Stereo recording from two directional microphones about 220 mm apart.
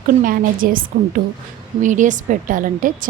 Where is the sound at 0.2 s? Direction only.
40° right (ahead or behind).